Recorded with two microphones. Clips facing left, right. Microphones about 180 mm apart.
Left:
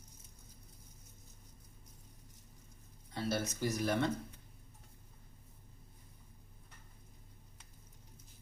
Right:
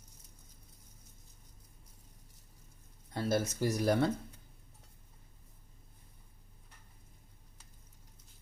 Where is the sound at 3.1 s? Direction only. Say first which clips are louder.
Right 4 dB; 45° right (ahead or behind).